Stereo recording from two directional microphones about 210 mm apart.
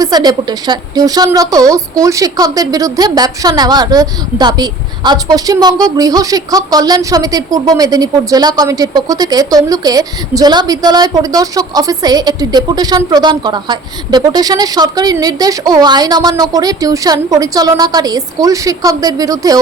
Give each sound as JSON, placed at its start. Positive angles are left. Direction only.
{"t": 0.0, "sound": "a woman's voice", "side_deg": -20}